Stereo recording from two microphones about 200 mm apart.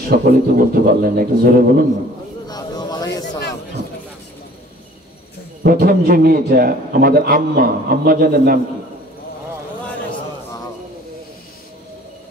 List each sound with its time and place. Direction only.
0.1 s a man's voice: 45° right (ahead or behind)
2.4 s a sound: 20° left (ahead or behind)
5.6 s a man's voice: 50° right (ahead or behind)